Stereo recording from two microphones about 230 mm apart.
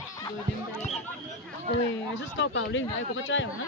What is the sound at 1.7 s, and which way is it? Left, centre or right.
Speech, left.